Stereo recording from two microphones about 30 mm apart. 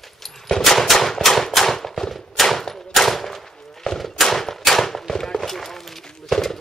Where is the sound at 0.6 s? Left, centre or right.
Centre.